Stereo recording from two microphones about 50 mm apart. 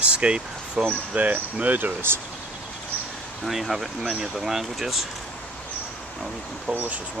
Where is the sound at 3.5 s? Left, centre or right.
Centre.